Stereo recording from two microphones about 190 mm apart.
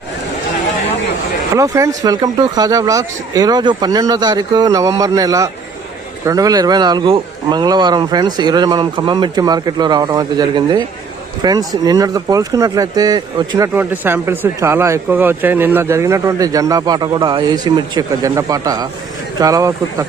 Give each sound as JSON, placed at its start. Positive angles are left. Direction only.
{"t": 1.5, "sound": "speech", "side_deg": -15}
{"t": 13.7, "sound": "speech", "side_deg": -10}